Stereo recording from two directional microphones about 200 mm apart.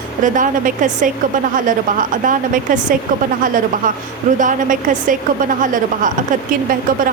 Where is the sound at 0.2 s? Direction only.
40° right (ahead or behind).